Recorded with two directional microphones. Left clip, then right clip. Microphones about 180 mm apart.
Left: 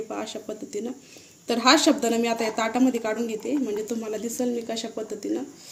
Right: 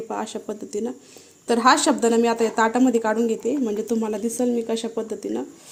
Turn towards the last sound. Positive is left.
turn(degrees=-50)  # may be behind; listen again after turning